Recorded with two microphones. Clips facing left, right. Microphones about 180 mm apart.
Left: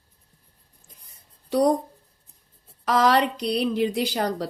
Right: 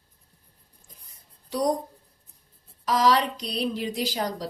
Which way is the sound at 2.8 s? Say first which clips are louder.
Left 2 dB; 60° left (ahead or behind).